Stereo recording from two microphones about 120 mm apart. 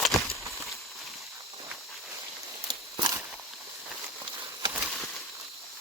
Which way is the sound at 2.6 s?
35° right (ahead or behind).